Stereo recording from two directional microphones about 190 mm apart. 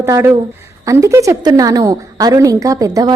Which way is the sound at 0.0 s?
15° right (ahead or behind).